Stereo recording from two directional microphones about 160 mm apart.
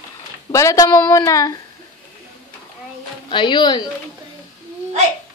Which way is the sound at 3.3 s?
30° left (ahead or behind).